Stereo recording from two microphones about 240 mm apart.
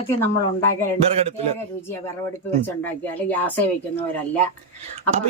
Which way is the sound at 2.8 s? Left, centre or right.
Centre.